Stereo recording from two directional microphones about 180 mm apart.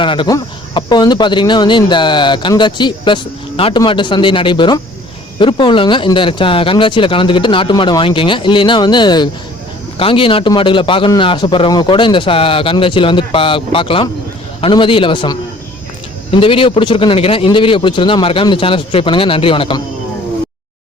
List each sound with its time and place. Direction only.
0.0 s a man's voice: 25° left (ahead or behind)